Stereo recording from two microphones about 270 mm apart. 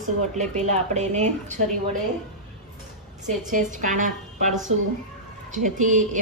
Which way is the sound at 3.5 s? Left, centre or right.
Right.